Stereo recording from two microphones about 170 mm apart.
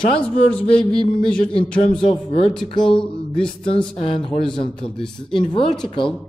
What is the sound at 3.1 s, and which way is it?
Speech, 30° left (ahead or behind).